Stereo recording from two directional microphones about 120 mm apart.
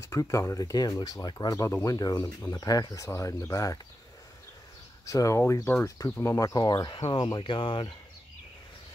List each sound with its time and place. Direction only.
0.0 s speech: 25° left (ahead or behind)
5.0 s speech: 25° left (ahead or behind); by 7.9 s 45° left (ahead or behind)